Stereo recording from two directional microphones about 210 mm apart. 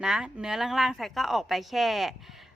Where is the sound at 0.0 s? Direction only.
5° right (ahead or behind).